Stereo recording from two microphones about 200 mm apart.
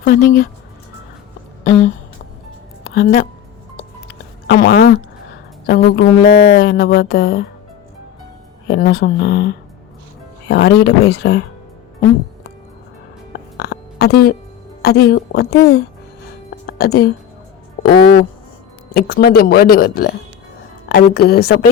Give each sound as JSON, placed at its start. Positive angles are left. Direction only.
{"t": 0.0, "sound": "speech", "side_deg": 50}
{"t": 2.9, "sound": "speech", "side_deg": 45}
{"t": 4.4, "sound": "speech", "side_deg": 50}
{"t": 8.6, "sound": "speech", "side_deg": 55}
{"t": 10.5, "sound": "speech", "side_deg": 55}
{"t": 13.3, "sound": "burping", "side_deg": 55}
{"t": 14.8, "sound": "speech", "side_deg": 50}
{"t": 16.6, "sound": "speech", "side_deg": 50}